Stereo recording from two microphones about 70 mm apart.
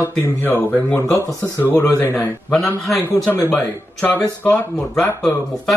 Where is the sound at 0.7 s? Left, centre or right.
Centre.